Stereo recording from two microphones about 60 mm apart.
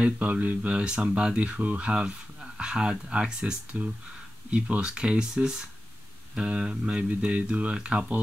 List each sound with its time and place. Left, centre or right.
0.0 s speech: right; by 3.9 s centre
4.5 s speech: right